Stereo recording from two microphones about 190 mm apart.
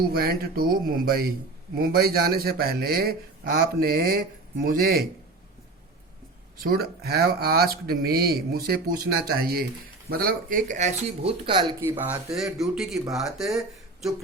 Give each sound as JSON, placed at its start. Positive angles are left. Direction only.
{"t": 0.0, "sound": "speech", "side_deg": -55}
{"t": 6.6, "sound": "speech", "side_deg": -55}
{"t": 11.8, "sound": "speech", "side_deg": -10}
{"t": 12.7, "sound": "speech", "side_deg": 0}